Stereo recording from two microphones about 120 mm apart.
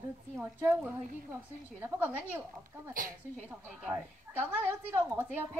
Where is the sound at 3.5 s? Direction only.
15° right (ahead or behind).